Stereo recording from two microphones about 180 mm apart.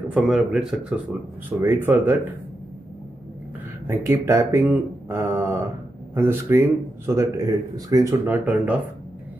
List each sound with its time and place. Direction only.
0.1 s speech: 5° right (ahead or behind)
3.8 s speech: 15° right (ahead or behind)